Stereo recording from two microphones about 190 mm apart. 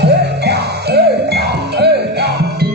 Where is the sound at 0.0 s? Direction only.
60° right (ahead or behind).